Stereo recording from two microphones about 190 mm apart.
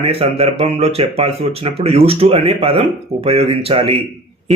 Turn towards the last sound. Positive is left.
turn(degrees=-30)  # may be behind; listen again after turning